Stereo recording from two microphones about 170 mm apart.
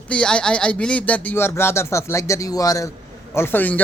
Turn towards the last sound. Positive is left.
turn(degrees=10)  # may be behind; listen again after turning